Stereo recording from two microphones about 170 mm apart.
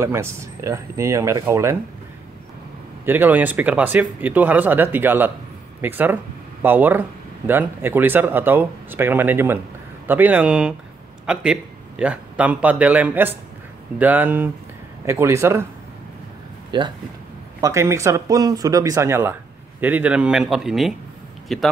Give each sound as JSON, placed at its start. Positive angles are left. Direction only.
{"t": 0.0, "sound": "a man's voice", "side_deg": -15}
{"t": 3.1, "sound": "a man's voice", "side_deg": -10}
{"t": 16.7, "sound": "speech", "side_deg": -30}
{"t": 17.6, "sound": "a man's voice", "side_deg": -15}